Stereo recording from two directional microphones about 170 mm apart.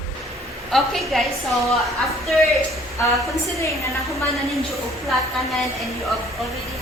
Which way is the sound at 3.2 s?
15° left (ahead or behind).